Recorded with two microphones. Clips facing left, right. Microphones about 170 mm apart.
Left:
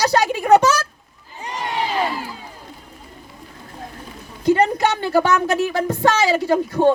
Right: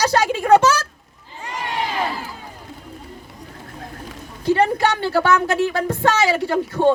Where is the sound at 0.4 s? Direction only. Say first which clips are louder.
Even; 15° left (ahead or behind).